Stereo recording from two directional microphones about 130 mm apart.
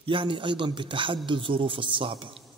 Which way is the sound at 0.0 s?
40° right (ahead or behind).